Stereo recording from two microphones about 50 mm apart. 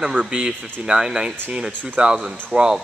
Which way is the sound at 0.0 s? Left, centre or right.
Centre.